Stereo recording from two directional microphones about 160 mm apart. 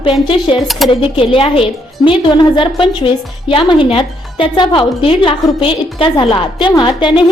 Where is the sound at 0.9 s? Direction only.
35° left (ahead or behind).